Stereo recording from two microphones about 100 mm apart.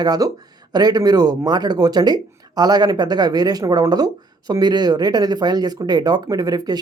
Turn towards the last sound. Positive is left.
turn(degrees=-40)  # may be behind; listen again after turning